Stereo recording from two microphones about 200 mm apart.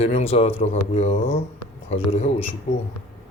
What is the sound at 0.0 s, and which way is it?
Speech, 35° left (ahead or behind).